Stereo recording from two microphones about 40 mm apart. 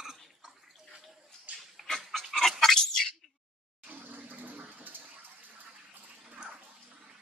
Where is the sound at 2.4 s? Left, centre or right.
Centre.